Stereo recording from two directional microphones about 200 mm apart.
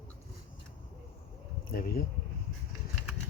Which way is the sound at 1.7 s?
45° left (ahead or behind).